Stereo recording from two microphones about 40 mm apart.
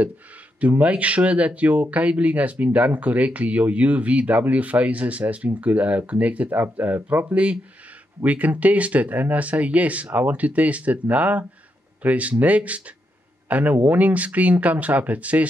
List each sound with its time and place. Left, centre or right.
0.6 s speech: right
6.5 s speech: right